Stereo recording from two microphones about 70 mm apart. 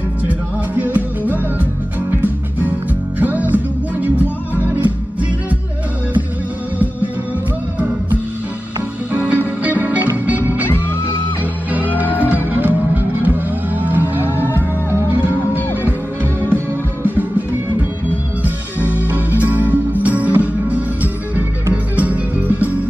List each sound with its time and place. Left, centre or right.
0.9 s music: right
3.2 s music: right
9.1 s music: right
12.2 s music: right
17.0 s music: right
18.8 s music: left
19.4 s music: right